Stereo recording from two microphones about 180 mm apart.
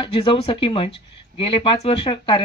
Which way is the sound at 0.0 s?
30° left (ahead or behind).